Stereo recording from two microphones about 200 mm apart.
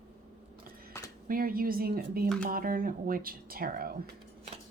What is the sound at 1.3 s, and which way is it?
Speech, 45° right (ahead or behind).